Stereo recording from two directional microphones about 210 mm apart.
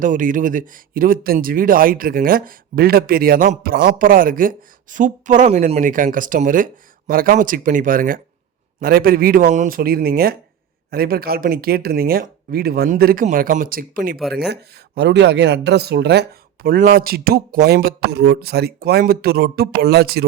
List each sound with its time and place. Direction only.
0.0 s speech: 40° right (ahead or behind)